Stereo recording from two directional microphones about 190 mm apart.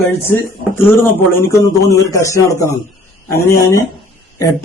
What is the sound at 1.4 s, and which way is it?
A man's voice, 15° left (ahead or behind).